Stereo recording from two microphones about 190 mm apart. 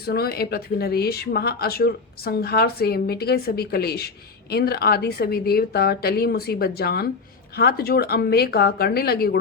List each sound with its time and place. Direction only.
0.0 s speech: 55° left (ahead or behind)